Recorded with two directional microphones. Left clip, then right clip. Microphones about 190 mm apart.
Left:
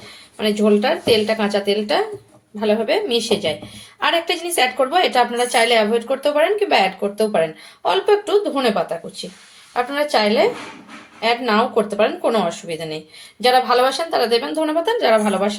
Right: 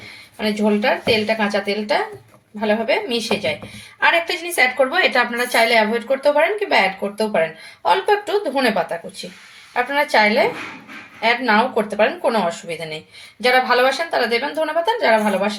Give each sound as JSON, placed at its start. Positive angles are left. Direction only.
{"t": 0.3, "sound": "a woman's voice", "side_deg": 15}
{"t": 9.7, "sound": "a woman's voice", "side_deg": 15}